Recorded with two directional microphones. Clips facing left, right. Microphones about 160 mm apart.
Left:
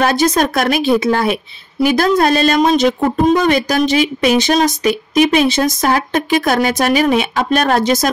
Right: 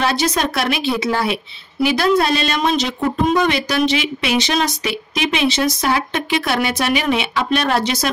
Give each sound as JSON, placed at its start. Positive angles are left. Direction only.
{"t": 0.0, "sound": "speech", "side_deg": 50}